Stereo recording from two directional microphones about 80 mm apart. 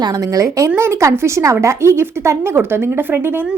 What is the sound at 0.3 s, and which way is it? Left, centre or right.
Speech, right.